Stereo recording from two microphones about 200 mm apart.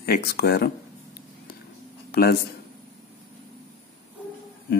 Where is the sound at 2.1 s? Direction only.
50° left (ahead or behind).